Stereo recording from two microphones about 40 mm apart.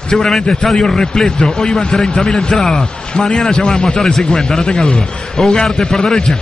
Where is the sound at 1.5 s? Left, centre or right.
Centre.